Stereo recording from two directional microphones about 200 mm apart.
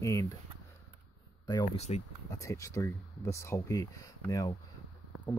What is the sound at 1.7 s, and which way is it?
Speech, 35° left (ahead or behind).